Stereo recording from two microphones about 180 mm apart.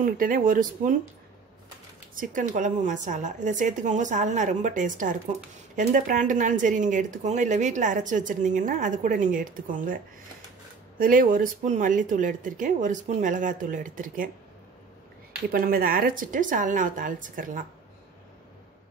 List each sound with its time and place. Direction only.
0.0 s speech: 50° right (ahead or behind)
2.1 s speech: 45° right (ahead or behind)
11.0 s speech: 50° right (ahead or behind)
15.5 s speech: 55° right (ahead or behind)